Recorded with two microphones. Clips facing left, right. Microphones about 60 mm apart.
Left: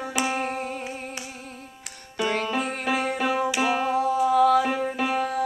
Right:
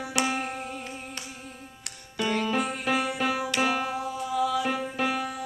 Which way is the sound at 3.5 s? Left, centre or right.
Centre.